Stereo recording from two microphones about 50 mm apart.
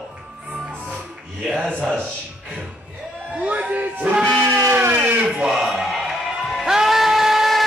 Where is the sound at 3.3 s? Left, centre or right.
Right.